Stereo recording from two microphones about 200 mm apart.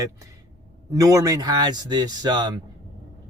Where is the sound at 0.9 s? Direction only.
15° right (ahead or behind).